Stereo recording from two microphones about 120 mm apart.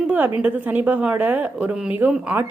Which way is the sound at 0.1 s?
15° right (ahead or behind).